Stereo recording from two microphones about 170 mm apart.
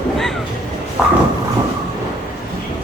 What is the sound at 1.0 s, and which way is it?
Train, 5° right (ahead or behind).